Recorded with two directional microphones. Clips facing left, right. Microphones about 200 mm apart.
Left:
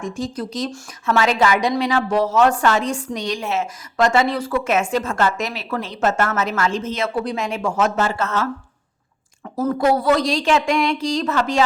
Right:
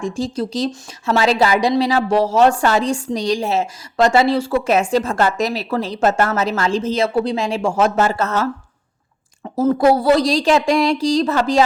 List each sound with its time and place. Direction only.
0.0 s a woman's voice: 30° right (ahead or behind)
9.4 s a woman's voice: 25° right (ahead or behind)